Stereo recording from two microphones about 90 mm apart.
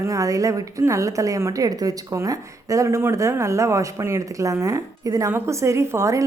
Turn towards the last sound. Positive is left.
turn(degrees=-30)  # may be behind; listen again after turning